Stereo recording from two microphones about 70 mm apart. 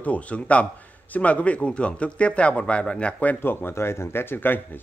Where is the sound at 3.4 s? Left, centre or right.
Left.